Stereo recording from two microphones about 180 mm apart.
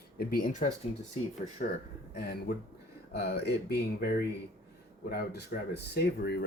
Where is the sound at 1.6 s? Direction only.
45° left (ahead or behind).